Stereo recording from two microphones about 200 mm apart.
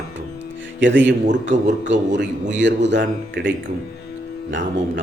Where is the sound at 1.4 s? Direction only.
60° right (ahead or behind).